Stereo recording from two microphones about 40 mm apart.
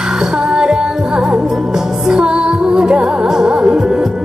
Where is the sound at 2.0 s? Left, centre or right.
Centre.